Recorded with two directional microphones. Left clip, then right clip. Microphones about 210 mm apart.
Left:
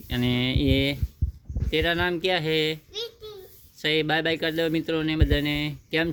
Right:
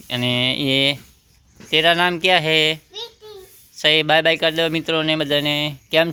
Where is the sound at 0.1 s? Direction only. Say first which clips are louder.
Right 7 dB; 20° left (ahead or behind).